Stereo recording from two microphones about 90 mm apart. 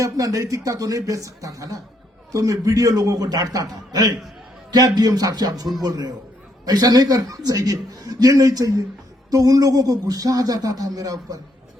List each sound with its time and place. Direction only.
0.0 s a man's voice: 40° right (ahead or behind)